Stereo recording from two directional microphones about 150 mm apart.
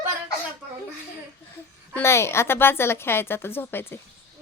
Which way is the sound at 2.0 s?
15° left (ahead or behind).